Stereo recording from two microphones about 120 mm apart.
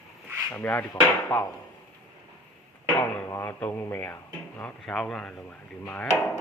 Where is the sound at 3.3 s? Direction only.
15° left (ahead or behind).